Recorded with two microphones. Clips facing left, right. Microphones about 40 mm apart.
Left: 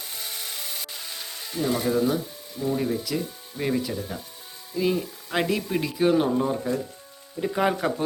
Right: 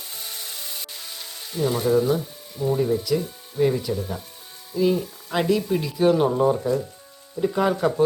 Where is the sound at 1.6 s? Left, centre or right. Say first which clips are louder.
Right 3 dB; centre.